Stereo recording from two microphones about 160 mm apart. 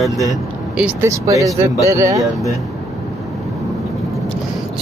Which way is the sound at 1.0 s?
20° right (ahead or behind).